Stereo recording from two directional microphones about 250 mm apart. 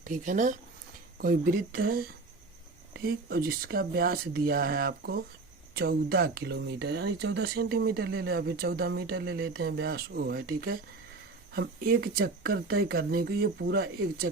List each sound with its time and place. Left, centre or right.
0.0 s speech: right